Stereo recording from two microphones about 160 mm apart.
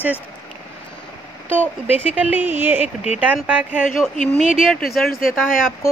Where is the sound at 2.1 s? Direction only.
10° right (ahead or behind).